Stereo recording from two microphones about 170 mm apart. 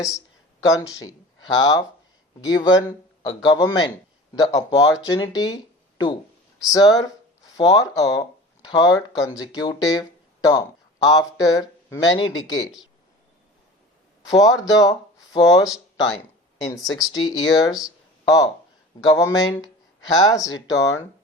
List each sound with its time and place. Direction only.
0.6 s speech: 20° left (ahead or behind)
6.6 s a sound: 20° left (ahead or behind)
7.7 s speech: 20° left (ahead or behind)
14.3 s speech: 20° left (ahead or behind)
17.7 s speech: 5° right (ahead or behind)
18.9 s speech: 20° left (ahead or behind)